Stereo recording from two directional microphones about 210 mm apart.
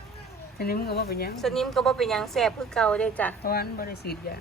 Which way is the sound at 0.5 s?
45° left (ahead or behind).